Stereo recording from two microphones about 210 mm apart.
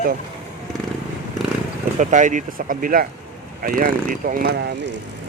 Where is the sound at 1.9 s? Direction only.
35° right (ahead or behind).